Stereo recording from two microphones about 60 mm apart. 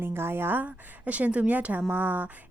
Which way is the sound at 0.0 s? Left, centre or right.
Right.